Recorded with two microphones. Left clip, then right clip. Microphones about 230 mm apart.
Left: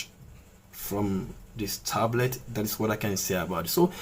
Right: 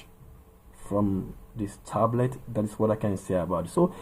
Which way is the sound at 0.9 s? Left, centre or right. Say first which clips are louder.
Right 3 dB; right.